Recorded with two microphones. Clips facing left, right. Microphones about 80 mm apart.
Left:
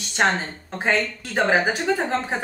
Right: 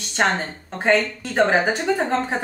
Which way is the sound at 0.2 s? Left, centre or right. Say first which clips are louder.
Even; centre.